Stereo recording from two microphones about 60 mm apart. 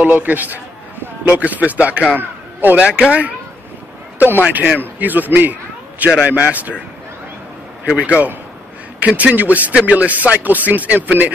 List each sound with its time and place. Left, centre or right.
0.0 s a man's voice: right
2.1 s a sound: right
2.8 s speech: centre
4.2 s a man's voice: right
7.8 s a man's voice: right